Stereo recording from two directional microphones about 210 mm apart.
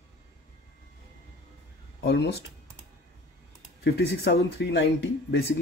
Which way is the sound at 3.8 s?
50° left (ahead or behind).